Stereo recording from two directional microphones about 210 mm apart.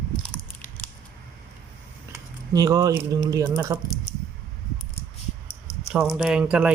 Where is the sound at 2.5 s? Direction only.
15° right (ahead or behind).